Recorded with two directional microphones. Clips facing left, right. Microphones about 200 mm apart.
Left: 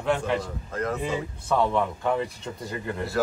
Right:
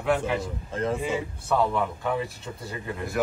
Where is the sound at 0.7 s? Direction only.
30° right (ahead or behind).